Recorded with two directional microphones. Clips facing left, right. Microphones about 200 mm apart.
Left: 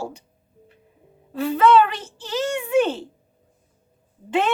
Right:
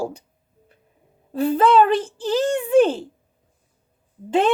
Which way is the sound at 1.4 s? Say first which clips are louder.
Right 1 dB; 35° right (ahead or behind).